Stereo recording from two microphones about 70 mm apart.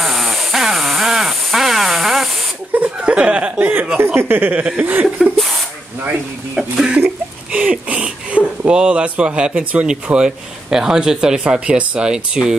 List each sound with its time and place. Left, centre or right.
0.0 s a sound: centre
2.7 s speech: centre
4.0 s speech: right; by 5.4 s centre
6.5 s speech: centre
7.5 s speech: centre